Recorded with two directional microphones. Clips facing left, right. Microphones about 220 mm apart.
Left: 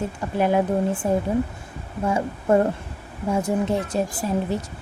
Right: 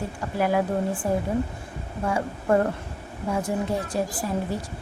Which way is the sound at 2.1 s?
25° left (ahead or behind).